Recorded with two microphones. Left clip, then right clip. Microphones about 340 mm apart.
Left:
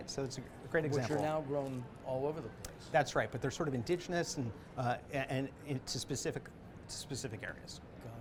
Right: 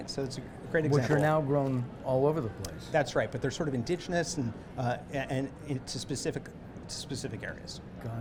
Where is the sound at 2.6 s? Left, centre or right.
Centre.